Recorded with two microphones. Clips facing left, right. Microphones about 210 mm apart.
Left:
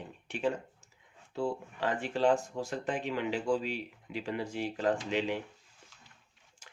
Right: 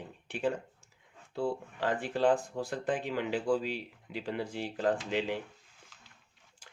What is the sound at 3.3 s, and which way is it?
Speech, 40° right (ahead or behind).